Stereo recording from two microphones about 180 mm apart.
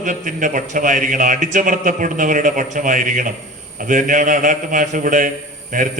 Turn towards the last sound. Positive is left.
turn(degrees=-45)  # may be behind; listen again after turning